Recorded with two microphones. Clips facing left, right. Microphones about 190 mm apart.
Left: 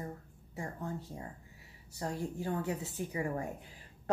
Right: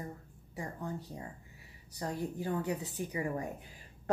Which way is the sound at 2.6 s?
15° right (ahead or behind).